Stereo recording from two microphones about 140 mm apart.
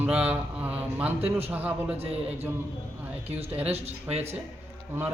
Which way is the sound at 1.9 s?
45° right (ahead or behind).